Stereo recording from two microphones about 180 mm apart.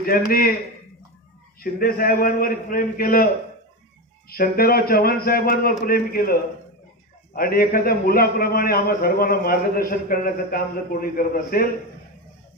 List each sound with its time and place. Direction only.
0.0 s a man's voice: 55° left (ahead or behind)
1.6 s a man's voice: 55° left (ahead or behind)
4.3 s a man's voice: 55° left (ahead or behind)